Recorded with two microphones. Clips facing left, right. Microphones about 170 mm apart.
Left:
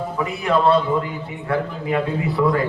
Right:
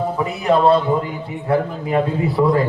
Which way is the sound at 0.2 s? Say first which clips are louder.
Right 2 dB; 35° right (ahead or behind).